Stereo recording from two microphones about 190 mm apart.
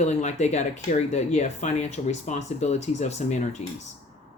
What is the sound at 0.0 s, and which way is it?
Speech, 35° left (ahead or behind).